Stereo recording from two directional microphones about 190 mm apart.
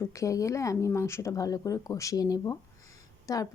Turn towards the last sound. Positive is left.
turn(degrees=15)  # may be behind; listen again after turning